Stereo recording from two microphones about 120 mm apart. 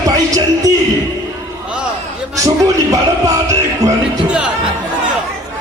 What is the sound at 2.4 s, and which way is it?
Speech, 30° right (ahead or behind).